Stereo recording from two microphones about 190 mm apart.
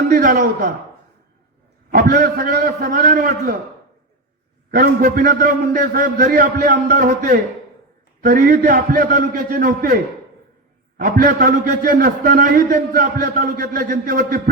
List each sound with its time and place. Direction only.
0.1 s a man's voice: 45° right (ahead or behind)
1.9 s a man's voice: 50° right (ahead or behind)
4.7 s a man's voice: 50° right (ahead or behind)